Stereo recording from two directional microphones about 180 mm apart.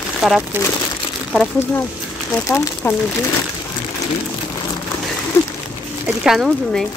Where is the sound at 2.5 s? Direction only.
15° left (ahead or behind).